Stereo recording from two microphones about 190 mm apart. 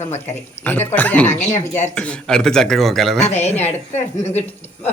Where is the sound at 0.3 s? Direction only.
10° left (ahead or behind).